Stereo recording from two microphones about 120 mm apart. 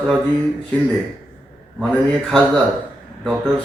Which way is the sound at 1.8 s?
10° left (ahead or behind).